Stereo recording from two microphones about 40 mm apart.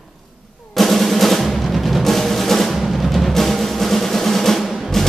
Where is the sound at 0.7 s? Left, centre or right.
Centre.